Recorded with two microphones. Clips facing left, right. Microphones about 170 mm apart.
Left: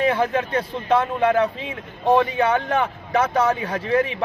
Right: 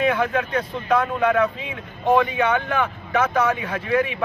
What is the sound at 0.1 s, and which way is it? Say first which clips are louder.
A man's voice: left 1 dB; 30° left (ahead or behind).